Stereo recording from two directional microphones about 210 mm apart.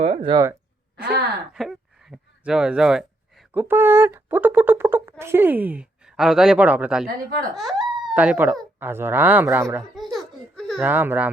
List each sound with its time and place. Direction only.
0.0 s speech: 25° right (ahead or behind)
1.5 s a woman's voice: centre (ahead or behind)
7.6 s a sound: centre (ahead or behind)
8.8 s a man's voice: 10° right (ahead or behind)
9.9 s baby laughter: centre (ahead or behind)
10.8 s a man's voice: 10° right (ahead or behind)